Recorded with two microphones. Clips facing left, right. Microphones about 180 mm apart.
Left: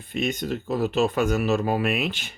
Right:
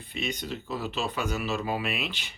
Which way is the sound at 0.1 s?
50° left (ahead or behind).